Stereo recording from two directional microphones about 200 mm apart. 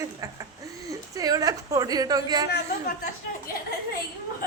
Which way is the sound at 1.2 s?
20° right (ahead or behind).